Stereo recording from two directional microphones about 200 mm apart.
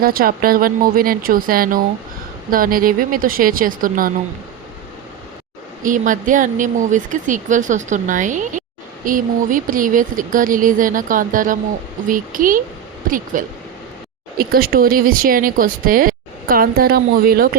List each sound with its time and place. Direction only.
0.0 s speech: 45° right (ahead or behind)
5.8 s speech: 40° right (ahead or behind)